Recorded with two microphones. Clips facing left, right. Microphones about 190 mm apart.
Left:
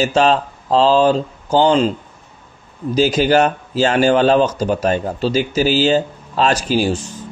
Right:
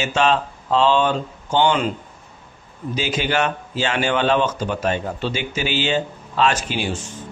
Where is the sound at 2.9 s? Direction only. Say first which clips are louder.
Left 8 dB; 40° left (ahead or behind).